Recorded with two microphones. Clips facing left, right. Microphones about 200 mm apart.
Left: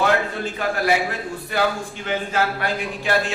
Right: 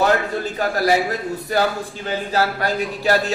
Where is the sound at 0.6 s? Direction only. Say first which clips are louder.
Right 2 dB; 40° right (ahead or behind).